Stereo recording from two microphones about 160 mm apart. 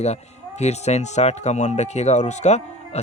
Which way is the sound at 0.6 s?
45° left (ahead or behind).